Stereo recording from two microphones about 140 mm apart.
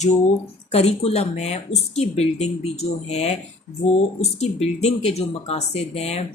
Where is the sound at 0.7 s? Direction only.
45° left (ahead or behind).